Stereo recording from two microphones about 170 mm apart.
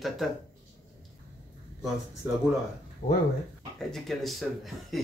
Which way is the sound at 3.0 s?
55° left (ahead or behind).